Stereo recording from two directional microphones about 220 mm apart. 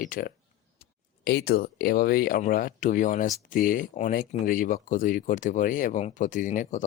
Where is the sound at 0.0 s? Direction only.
40° left (ahead or behind).